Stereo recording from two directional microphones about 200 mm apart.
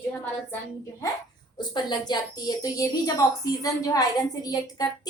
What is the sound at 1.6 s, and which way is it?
A woman's voice, 20° left (ahead or behind).